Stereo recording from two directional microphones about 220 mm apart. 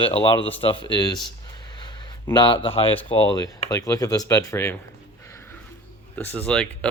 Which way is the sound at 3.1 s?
20° left (ahead or behind).